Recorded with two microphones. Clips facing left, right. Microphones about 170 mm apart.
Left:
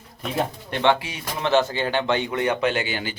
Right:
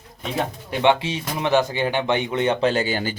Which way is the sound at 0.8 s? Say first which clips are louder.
Right 2 dB; 20° right (ahead or behind).